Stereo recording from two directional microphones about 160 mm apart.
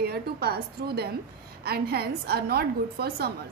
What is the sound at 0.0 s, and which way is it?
A woman's voice, 80° right.